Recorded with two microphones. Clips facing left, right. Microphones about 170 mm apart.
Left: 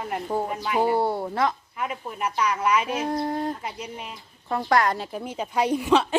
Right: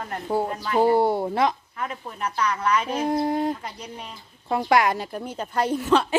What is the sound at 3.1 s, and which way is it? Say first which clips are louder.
Speech: right 3 dB; 15° right (ahead or behind).